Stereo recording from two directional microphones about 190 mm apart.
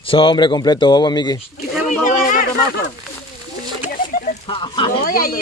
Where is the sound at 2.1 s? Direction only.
45° left (ahead or behind).